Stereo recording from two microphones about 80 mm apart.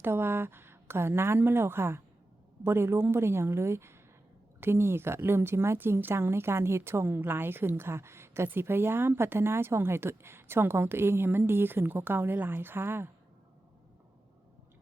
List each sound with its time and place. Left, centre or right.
0.0 s a woman's voice: right